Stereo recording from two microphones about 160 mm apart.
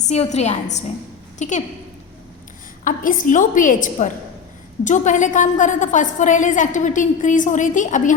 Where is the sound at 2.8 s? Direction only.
55° left (ahead or behind).